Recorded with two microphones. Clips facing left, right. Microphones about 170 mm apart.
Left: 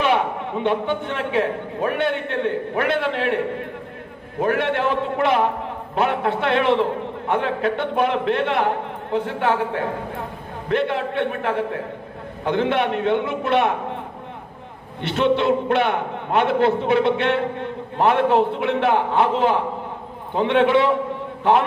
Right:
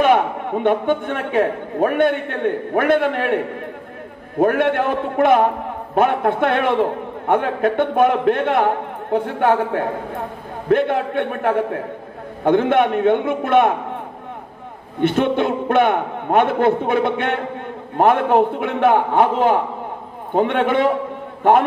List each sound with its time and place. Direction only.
0.0 s a man's voice: 50° right (ahead or behind)
4.4 s a man's voice: 50° right (ahead or behind)
15.0 s a man's voice: 50° right (ahead or behind)